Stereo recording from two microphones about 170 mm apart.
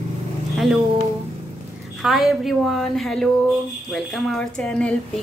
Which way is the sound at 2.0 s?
Centre (ahead or behind).